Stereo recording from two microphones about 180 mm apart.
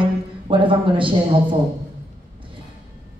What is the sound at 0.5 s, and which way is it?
A woman's voice, 30° right (ahead or behind).